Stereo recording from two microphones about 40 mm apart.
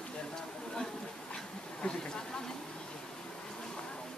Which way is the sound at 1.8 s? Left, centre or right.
Left.